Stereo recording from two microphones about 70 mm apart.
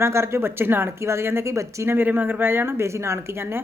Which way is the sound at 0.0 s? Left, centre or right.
Right.